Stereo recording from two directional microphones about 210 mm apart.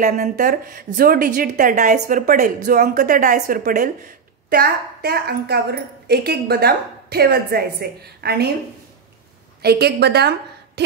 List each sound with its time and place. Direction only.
0.0 s a woman's voice: 35° right (ahead or behind)
9.6 s a woman's voice: 50° right (ahead or behind)